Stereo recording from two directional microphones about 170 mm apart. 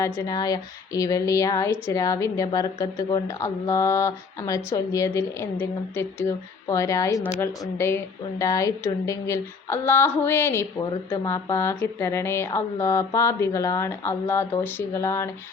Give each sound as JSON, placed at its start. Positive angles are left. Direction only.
{"t": 0.0, "sound": "speech", "side_deg": 20}